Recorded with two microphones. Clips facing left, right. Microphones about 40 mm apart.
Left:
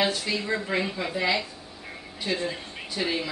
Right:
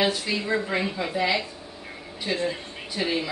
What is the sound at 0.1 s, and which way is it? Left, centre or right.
Speech, centre.